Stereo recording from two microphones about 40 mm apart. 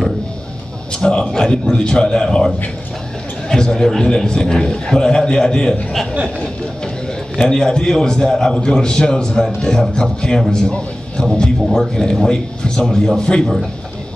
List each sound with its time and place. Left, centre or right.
0.9 s a man's voice: left
7.3 s a man's voice: left
11.6 s a man's voice: centre
11.9 s a man's voice: centre